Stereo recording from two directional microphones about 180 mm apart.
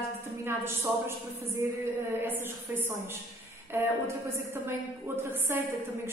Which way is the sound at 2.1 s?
10° right (ahead or behind).